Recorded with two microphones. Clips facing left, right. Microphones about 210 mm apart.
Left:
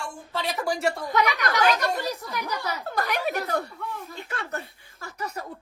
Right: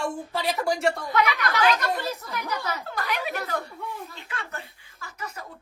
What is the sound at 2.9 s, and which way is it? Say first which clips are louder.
Speech: left 6 dB; 45° left (ahead or behind).